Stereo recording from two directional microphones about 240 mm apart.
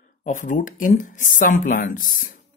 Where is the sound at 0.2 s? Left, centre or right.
Left.